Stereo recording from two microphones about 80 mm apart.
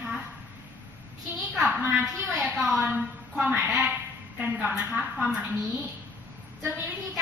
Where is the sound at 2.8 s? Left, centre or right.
Centre.